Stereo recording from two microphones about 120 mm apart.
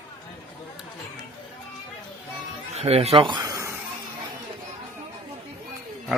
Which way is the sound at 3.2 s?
35° right (ahead or behind).